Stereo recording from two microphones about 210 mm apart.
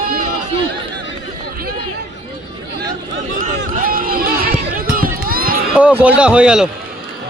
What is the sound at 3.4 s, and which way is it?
Run, 40° right (ahead or behind).